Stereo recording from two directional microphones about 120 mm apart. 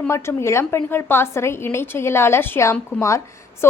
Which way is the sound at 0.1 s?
20° left (ahead or behind).